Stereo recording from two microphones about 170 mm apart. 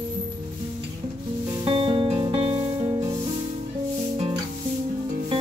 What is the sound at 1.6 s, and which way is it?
Music, 30° right (ahead or behind).